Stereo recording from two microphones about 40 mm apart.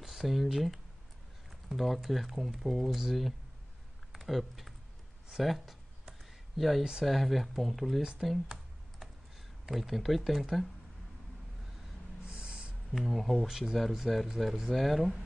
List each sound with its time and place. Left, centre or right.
0.0 s speech: centre
4.1 s typing: centre
5.4 s speech: centre
6.8 s speech: centre
7.1 s speech: centre
9.7 s speech: centre
12.2 s snort: right
12.9 s speech: centre
13.5 s speech: centre